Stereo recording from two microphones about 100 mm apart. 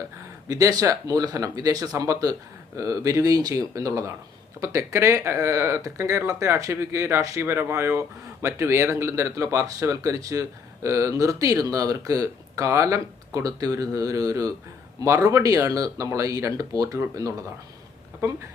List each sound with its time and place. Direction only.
0.4 s speech: 35° right (ahead or behind)